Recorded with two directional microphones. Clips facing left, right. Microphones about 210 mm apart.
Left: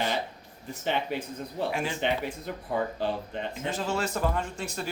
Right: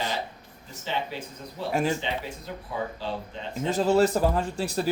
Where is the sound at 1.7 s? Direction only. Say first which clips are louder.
Right 6 dB; 40° right (ahead or behind).